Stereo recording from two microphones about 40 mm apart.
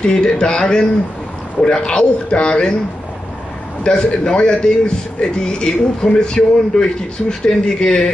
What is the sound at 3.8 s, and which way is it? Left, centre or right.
A man's voice, left.